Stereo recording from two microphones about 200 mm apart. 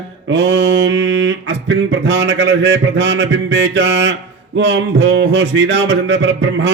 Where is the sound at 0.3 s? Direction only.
60° right (ahead or behind).